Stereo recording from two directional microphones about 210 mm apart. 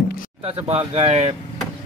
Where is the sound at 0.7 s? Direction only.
30° right (ahead or behind).